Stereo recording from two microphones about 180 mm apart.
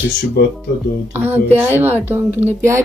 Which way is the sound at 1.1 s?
10° right (ahead or behind).